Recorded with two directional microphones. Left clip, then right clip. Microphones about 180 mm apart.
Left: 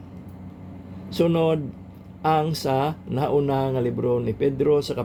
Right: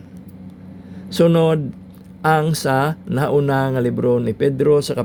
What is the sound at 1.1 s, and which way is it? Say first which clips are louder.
Speech: right 6 dB; 45° right (ahead or behind).